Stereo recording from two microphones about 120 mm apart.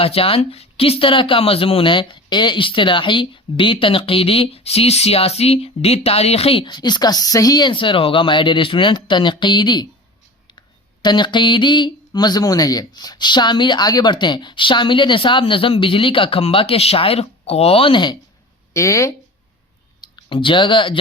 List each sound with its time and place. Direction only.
0.0 s speech: 50° left (ahead or behind)
11.0 s speech: 40° left (ahead or behind)
18.7 s speech: 25° left (ahead or behind)
20.0 s speech: 40° left (ahead or behind)